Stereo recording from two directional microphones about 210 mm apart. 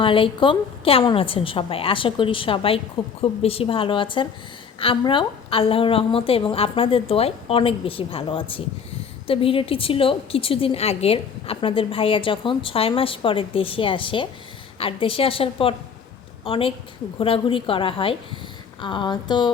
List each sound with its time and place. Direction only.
0.0 s a woman's voice: 25° left (ahead or behind)